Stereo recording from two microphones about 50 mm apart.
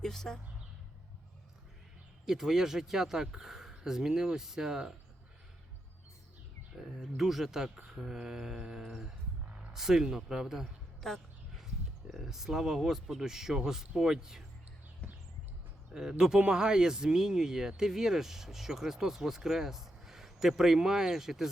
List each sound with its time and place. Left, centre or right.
0.0 s speech: centre
2.2 s speech: centre
6.7 s speech: centre
11.0 s speech: centre
15.0 s a sound: left
16.0 s speech: centre